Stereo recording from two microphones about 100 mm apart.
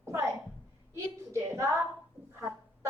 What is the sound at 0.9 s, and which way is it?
Speech, 30° right (ahead or behind).